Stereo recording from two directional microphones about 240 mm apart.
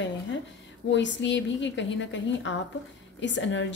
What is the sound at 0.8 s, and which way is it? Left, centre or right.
A woman's voice, left.